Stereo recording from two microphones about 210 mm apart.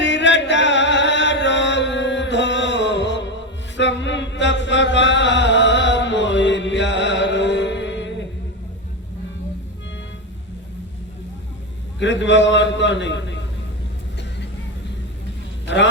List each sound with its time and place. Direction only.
0.0 s chant: 60° left (ahead or behind)
11.9 s a man's voice: 60° left (ahead or behind)
15.6 s a sound: 60° left (ahead or behind)